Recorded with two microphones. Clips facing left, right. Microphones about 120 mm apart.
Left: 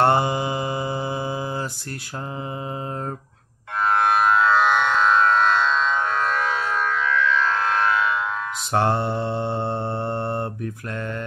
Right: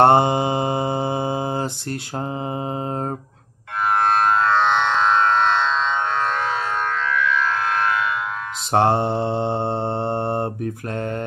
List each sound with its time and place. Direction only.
0.0 s mantra: 25° right (ahead or behind)
4.2 s music: 5° left (ahead or behind)
7.2 s music: 25° left (ahead or behind)
8.7 s mantra: 25° right (ahead or behind)